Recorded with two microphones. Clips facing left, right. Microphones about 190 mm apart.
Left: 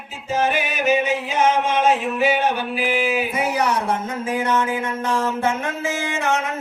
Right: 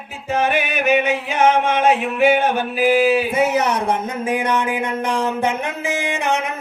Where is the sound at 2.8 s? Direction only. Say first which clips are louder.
Right 8 dB; 40° right (ahead or behind); by 3.8 s 20° right (ahead or behind).